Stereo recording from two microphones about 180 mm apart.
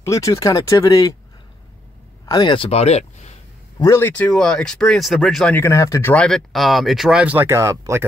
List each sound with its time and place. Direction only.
0.0 s speech: 15° left (ahead or behind)
2.2 s speech: 25° left (ahead or behind)
3.8 s speech: 15° left (ahead or behind); by 8.0 s 20° right (ahead or behind)